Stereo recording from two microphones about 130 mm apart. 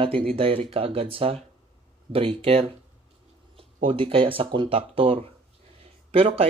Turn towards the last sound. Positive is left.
turn(degrees=-50)  # may be behind; listen again after turning